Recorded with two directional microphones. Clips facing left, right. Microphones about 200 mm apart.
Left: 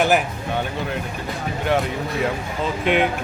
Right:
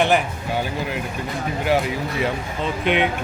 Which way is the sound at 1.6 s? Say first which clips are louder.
Even; centre (ahead or behind).